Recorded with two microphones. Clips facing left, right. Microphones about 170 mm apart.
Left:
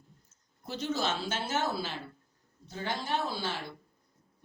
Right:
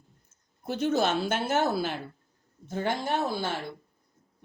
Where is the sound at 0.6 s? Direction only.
55° right (ahead or behind).